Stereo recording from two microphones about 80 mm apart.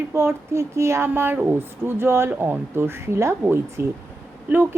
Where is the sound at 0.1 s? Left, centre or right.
Right.